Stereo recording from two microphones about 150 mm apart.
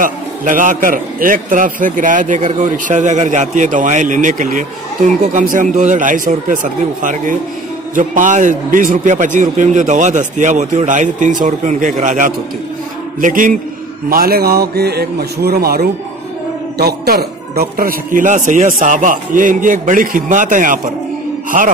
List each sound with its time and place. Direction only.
0.0 s a man's voice: 60° right (ahead or behind)
14.0 s a man's voice: 75° right (ahead or behind)